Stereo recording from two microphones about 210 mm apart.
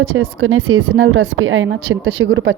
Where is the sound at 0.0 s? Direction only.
80° right.